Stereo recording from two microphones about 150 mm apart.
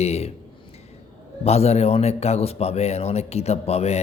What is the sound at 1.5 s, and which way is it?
A man's voice, 45° left (ahead or behind).